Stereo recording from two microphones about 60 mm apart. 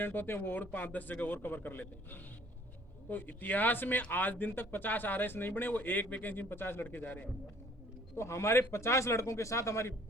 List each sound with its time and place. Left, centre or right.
0.0 s speech: left
8.1 s speech: left